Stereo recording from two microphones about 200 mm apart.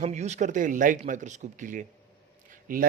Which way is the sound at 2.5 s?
45° right (ahead or behind).